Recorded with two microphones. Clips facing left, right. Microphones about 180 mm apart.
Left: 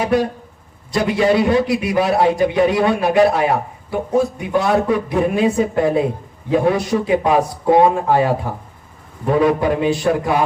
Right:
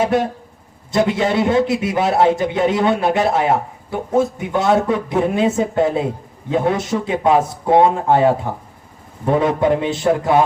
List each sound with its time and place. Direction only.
0.0 s a man's voice: 25° right (ahead or behind)